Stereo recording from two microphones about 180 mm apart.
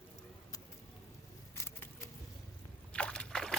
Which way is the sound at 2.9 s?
5° left (ahead or behind).